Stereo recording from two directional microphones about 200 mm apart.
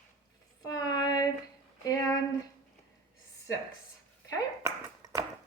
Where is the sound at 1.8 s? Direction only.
20° left (ahead or behind).